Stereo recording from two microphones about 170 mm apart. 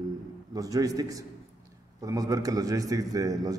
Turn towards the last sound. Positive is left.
turn(degrees=-20)  # may be behind; listen again after turning